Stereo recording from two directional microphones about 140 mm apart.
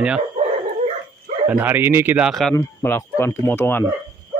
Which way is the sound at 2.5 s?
20° left (ahead or behind).